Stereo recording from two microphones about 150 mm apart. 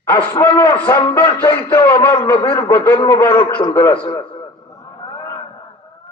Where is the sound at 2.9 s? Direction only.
25° left (ahead or behind).